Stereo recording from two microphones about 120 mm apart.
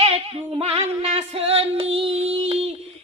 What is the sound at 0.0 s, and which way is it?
Female singing, 55° right (ahead or behind).